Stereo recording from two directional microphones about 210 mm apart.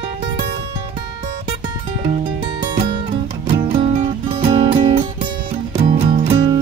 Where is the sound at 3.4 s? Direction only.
25° right (ahead or behind).